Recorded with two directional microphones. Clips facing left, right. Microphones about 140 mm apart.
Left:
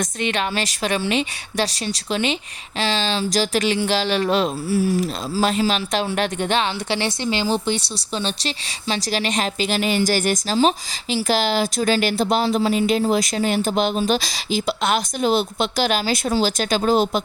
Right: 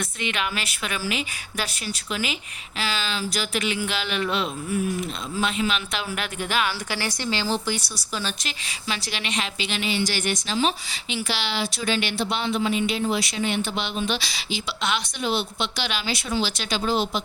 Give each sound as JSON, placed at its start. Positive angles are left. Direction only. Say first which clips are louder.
{"t": 0.2, "sound": "a woman's voice", "louder": "left 5 dB", "side_deg": 35}
{"t": 8.2, "sound": "speech", "louder": "left 6 dB", "side_deg": 30}